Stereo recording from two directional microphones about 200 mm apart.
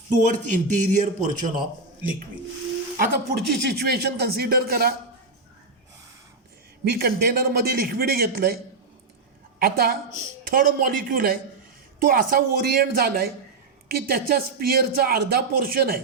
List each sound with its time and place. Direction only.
0.2 s a man's voice: 40° right (ahead or behind)
6.9 s speech: 50° right (ahead or behind)
9.6 s a woman's voice: 50° right (ahead or behind)